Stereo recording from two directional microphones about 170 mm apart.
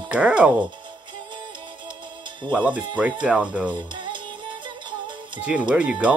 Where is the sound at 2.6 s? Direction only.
10° right (ahead or behind).